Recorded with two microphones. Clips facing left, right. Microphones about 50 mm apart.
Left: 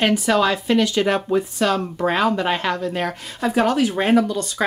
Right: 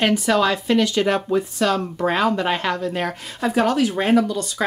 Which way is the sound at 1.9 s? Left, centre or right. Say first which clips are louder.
Even; centre.